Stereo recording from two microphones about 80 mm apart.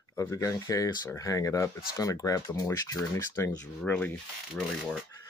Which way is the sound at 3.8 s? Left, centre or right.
Centre.